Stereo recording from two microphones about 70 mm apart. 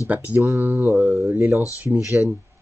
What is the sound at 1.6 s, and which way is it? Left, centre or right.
Speech, left.